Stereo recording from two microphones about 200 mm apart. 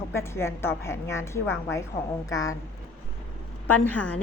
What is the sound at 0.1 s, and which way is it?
A woman's voice, 15° left (ahead or behind).